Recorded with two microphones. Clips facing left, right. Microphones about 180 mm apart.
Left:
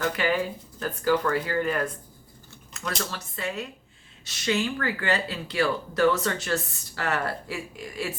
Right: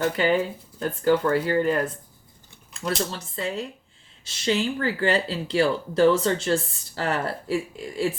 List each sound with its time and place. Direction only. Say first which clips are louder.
0.0 s speech: right 4 dB; 30° right (ahead or behind)